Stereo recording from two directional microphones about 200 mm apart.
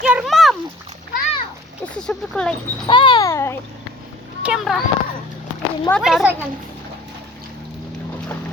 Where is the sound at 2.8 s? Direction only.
25° left (ahead or behind).